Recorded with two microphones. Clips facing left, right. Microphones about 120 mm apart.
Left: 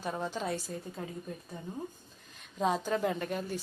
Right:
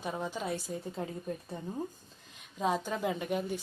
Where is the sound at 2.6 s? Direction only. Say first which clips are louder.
Left 2 dB; 5° right (ahead or behind).